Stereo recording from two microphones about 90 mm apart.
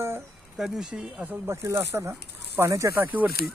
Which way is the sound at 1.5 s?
30° right (ahead or behind).